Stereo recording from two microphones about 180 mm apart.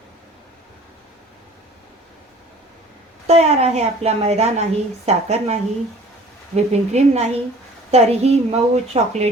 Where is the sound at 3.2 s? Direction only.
35° right (ahead or behind).